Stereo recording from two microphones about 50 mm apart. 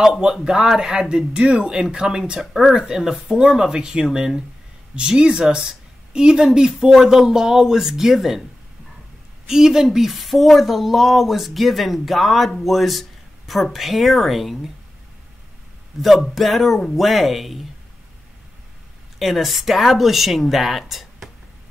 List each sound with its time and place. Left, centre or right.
0.0 s speech: centre
9.5 s speech: centre
16.2 s speech: centre
19.1 s speech: centre